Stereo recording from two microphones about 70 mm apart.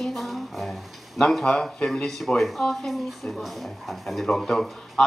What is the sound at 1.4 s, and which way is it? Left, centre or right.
Speech, centre.